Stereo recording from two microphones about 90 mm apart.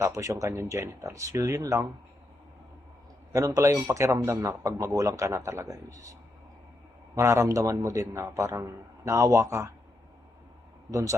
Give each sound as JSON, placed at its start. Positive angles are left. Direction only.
{"t": 0.0, "sound": "a man's voice", "side_deg": -35}
{"t": 3.3, "sound": "a man's voice", "side_deg": -35}
{"t": 7.2, "sound": "a man's voice", "side_deg": -30}